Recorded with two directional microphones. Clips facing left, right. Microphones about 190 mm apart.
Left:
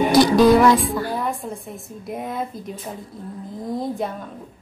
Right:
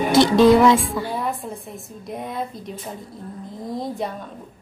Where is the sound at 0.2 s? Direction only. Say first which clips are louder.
Right 1 dB; 25° right (ahead or behind).